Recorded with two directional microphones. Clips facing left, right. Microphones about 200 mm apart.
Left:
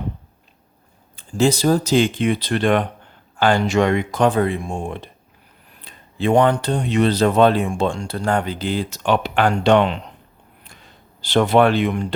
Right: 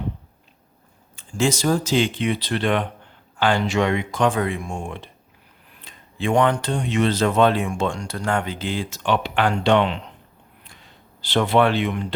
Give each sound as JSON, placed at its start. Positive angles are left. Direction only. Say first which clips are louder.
{"t": 1.1, "sound": "speech", "louder": "left 4 dB", "side_deg": 35}
{"t": 11.2, "sound": "speech", "louder": "left 3 dB", "side_deg": 45}